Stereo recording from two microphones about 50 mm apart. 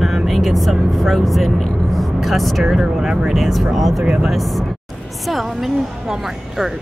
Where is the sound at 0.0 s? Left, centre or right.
Centre.